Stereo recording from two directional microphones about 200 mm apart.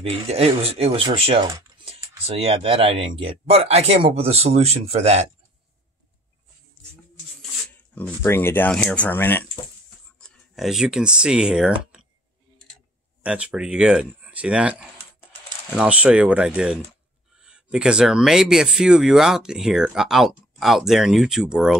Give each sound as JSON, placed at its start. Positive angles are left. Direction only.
{"t": 0.0, "sound": "speech", "side_deg": -30}
{"t": 7.9, "sound": "speech", "side_deg": 10}
{"t": 10.2, "sound": "speech", "side_deg": 0}
{"t": 13.2, "sound": "speech", "side_deg": -5}